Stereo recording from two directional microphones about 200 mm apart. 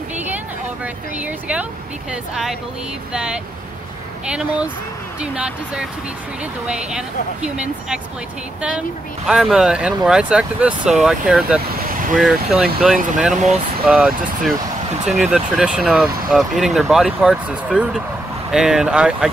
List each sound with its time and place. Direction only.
1.1 s speech: 5° right (ahead or behind)
3.1 s speech: 5° right (ahead or behind)
11.8 s vehicle: 45° right (ahead or behind)
12.2 s speech: 5° right (ahead or behind)
13.3 s speech: 35° right (ahead or behind)
13.8 s speech: centre (ahead or behind)